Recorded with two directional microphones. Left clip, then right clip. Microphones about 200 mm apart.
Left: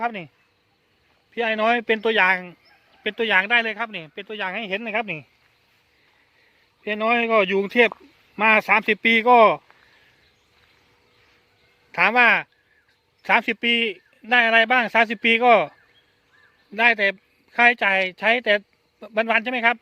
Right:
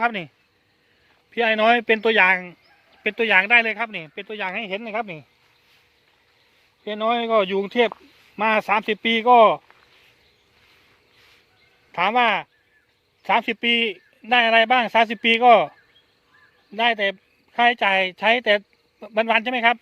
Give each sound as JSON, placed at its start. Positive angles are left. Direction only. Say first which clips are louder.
{"t": 0.0, "sound": "speech", "louder": "right 4 dB", "side_deg": -20}
{"t": 1.3, "sound": "a man's voice", "louder": "right 3 dB", "side_deg": -10}
{"t": 6.8, "sound": "speech", "louder": "left 1 dB", "side_deg": 10}
{"t": 11.9, "sound": "a man's voice", "louder": "left 3 dB", "side_deg": 5}
{"t": 16.7, "sound": "speech", "louder": "left 2 dB", "side_deg": 5}